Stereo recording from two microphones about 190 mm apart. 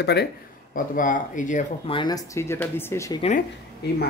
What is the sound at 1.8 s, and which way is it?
Speech, 25° left (ahead or behind).